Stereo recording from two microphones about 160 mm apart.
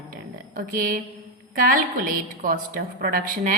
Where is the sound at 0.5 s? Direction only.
60° right (ahead or behind).